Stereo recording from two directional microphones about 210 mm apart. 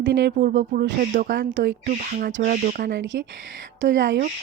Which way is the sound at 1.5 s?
55° right (ahead or behind).